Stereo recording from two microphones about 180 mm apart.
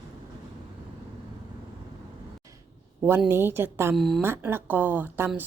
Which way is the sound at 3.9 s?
Centre (ahead or behind).